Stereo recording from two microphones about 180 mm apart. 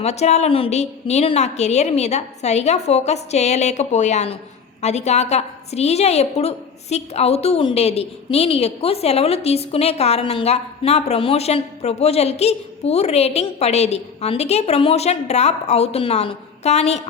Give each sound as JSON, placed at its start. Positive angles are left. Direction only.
{"t": 0.0, "sound": "a woman's voice", "side_deg": 35}